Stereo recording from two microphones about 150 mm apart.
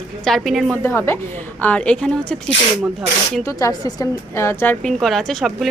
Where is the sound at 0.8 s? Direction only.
15° left (ahead or behind).